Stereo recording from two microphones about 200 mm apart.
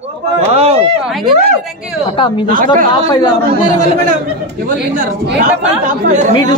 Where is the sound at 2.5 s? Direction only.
45° right (ahead or behind).